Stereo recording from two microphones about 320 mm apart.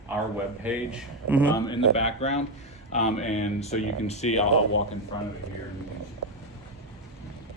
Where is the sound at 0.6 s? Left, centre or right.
Centre.